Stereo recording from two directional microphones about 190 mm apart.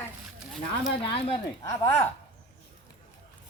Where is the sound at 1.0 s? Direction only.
25° left (ahead or behind).